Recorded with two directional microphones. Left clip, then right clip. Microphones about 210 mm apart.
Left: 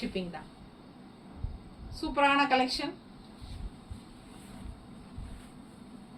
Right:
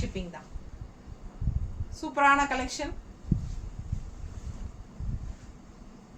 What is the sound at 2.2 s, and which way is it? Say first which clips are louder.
Speech: right 2 dB; 15° right (ahead or behind).